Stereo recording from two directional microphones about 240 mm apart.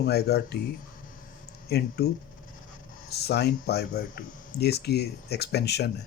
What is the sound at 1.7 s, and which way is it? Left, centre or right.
Speech, left.